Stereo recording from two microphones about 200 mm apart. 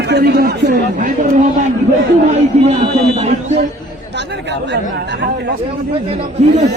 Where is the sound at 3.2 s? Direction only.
35° right (ahead or behind).